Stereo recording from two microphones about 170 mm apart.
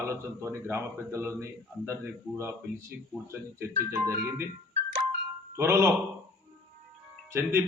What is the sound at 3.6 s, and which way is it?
Speech, 15° right (ahead or behind).